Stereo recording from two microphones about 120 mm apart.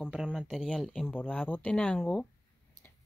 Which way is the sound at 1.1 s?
15° left (ahead or behind).